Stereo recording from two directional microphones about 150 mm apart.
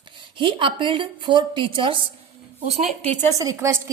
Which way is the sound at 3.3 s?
20° right (ahead or behind).